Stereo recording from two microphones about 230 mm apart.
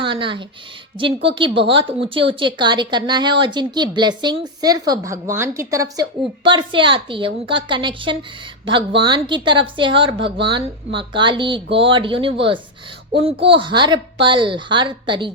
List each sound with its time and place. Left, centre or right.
0.0 s a woman's voice: right